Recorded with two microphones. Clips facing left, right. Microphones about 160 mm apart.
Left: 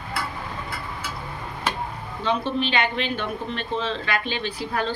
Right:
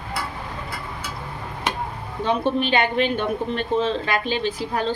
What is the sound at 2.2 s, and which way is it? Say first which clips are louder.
Speech: right 3 dB; 50° right (ahead or behind).